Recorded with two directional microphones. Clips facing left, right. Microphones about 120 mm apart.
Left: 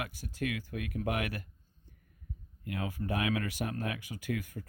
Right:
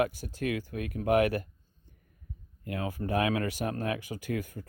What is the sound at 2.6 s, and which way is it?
Speech, 35° right (ahead or behind).